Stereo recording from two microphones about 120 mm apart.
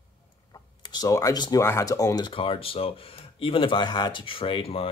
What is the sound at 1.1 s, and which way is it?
Speech, 30° left (ahead or behind).